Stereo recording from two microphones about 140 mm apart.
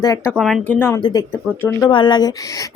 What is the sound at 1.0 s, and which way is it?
Speech, 30° left (ahead or behind).